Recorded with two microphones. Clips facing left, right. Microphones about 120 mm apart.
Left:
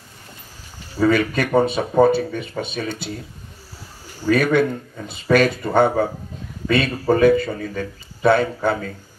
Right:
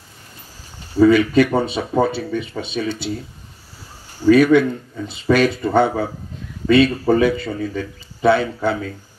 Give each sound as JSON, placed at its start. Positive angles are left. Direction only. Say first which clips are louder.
{"t": 1.0, "sound": "speech", "louder": "right 5 dB", "side_deg": 50}
{"t": 4.3, "sound": "speech", "louder": "right 5 dB", "side_deg": 50}